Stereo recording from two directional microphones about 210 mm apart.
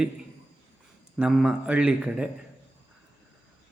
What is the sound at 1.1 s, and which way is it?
Speech, 5° right (ahead or behind).